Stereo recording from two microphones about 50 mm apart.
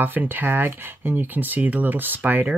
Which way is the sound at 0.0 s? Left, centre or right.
Right.